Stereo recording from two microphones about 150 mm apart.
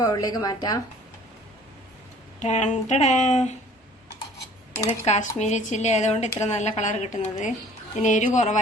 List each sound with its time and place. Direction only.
0.0 s a woman's voice: 25° left (ahead or behind)
2.4 s a woman's voice: 50° left (ahead or behind)
5.0 s a woman's voice: 50° left (ahead or behind)